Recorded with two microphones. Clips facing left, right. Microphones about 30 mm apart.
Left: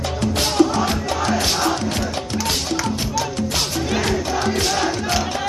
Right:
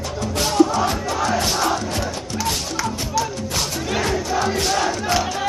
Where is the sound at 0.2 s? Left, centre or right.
Left.